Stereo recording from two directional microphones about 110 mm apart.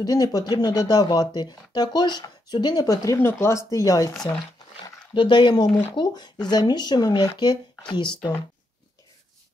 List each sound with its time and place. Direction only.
0.0 s speech: 35° left (ahead or behind)
5.1 s speech: 45° left (ahead or behind)